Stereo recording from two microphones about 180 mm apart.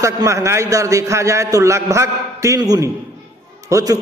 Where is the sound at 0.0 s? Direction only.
15° right (ahead or behind).